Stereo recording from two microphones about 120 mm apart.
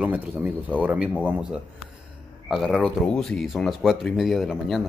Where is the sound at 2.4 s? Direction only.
Centre (ahead or behind).